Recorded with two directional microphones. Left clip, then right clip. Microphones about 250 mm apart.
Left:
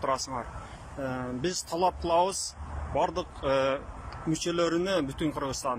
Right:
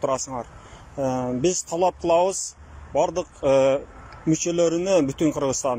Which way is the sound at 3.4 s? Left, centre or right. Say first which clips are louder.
Right 9 dB; centre.